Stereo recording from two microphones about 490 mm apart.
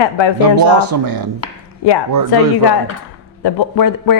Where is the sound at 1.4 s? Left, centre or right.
Left.